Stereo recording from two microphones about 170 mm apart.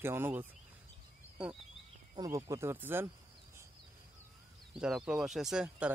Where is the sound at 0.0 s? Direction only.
15° right (ahead or behind).